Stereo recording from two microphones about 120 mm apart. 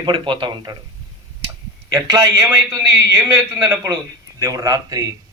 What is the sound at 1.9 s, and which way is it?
Speech, 35° right (ahead or behind).